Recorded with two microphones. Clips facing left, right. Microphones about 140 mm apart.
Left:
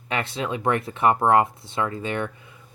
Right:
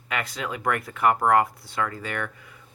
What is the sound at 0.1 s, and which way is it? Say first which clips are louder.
Speech: left 3 dB; 25° left (ahead or behind).